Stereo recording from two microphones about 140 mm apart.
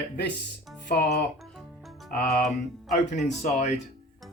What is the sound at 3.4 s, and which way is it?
Speech, 60° left (ahead or behind).